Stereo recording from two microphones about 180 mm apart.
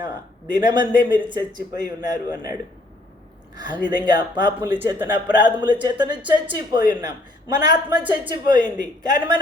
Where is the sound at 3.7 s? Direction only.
25° right (ahead or behind).